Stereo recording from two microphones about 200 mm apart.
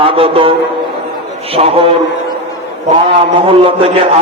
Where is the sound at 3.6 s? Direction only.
25° right (ahead or behind).